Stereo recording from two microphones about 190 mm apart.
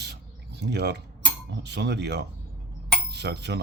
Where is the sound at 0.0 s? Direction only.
60° right (ahead or behind).